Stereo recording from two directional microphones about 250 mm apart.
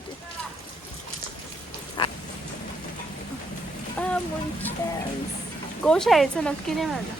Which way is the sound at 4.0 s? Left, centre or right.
Centre.